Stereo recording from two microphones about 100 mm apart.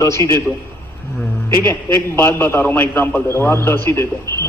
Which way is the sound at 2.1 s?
25° left (ahead or behind).